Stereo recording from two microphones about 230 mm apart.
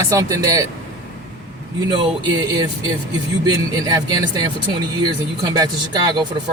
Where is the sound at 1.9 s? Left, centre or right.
Centre.